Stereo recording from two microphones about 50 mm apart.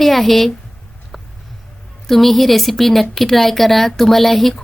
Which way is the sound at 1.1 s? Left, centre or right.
Centre.